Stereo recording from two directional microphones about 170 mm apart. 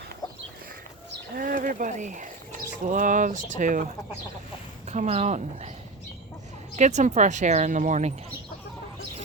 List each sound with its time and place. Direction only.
1.4 s speech: 55° right (ahead or behind)
4.9 s speech: 40° right (ahead or behind)
6.7 s speech: 45° right (ahead or behind)